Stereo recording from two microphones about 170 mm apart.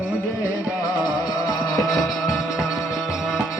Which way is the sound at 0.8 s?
20° left (ahead or behind).